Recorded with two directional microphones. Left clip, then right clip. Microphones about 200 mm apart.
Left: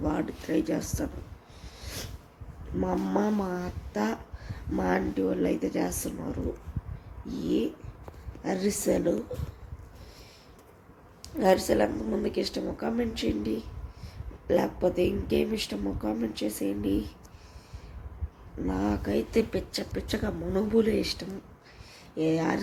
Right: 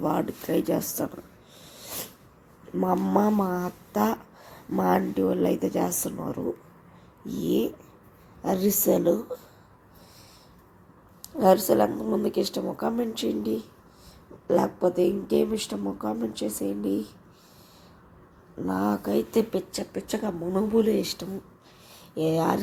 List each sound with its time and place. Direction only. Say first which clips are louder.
0.0 s speech: right 4 dB; 25° right (ahead or behind)
1.8 s a sound: right 2 dB; 20° right (ahead or behind)
2.8 s speech: right 5 dB; 20° right (ahead or behind)
11.2 s speech: right 4 dB; 15° right (ahead or behind)
18.6 s speech: right 3 dB; 15° right (ahead or behind)